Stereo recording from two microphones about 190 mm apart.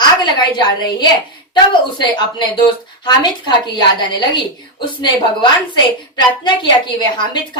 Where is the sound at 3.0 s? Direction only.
25° left (ahead or behind).